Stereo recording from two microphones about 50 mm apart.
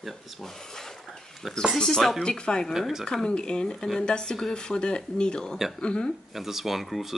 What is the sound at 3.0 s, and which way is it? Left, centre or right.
Speech, centre.